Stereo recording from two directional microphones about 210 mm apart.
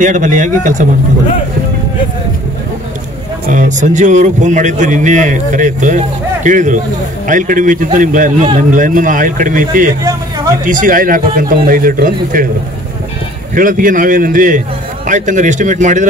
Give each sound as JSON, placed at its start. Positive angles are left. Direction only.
{"t": 0.0, "sound": "a man's voice", "side_deg": -35}
{"t": 3.4, "sound": "a man's voice", "side_deg": -35}
{"t": 13.6, "sound": "a man's voice", "side_deg": -40}